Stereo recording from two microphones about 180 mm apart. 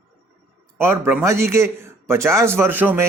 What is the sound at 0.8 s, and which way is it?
A man's voice, 10° right (ahead or behind).